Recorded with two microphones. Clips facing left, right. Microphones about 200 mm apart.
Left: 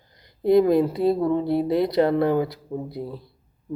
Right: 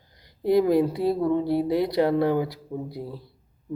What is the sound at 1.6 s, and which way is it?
Speech, 15° right (ahead or behind).